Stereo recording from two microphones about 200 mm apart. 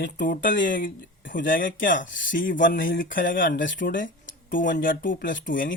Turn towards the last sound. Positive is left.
turn(degrees=40)  # may be behind; listen again after turning